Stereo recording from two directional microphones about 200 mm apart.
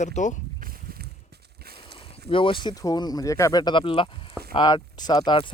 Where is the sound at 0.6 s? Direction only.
45° right (ahead or behind).